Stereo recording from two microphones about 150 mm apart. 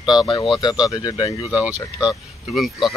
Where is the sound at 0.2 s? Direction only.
30° left (ahead or behind).